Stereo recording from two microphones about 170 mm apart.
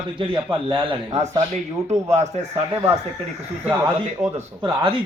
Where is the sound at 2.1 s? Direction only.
40° right (ahead or behind).